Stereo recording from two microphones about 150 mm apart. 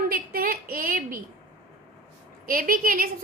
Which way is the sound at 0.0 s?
70° right (ahead or behind).